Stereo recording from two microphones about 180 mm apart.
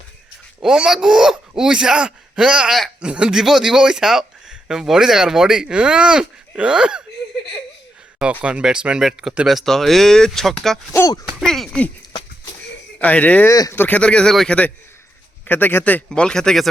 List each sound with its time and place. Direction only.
0.6 s speech: centre (ahead or behind)
8.2 s speech: 5° right (ahead or behind)
10.9 s speech: 15° left (ahead or behind)
11.3 s speech: centre (ahead or behind)
13.0 s speech: 10° left (ahead or behind)